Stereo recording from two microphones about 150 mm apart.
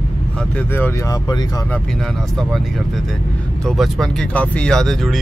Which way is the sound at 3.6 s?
Centre (ahead or behind).